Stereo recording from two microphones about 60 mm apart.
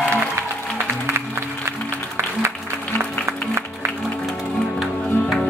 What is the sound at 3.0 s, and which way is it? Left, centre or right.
Music, right.